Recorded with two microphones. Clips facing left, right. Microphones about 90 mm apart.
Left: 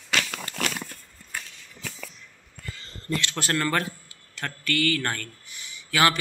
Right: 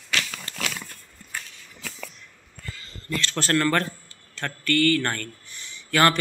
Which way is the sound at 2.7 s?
20° left (ahead or behind).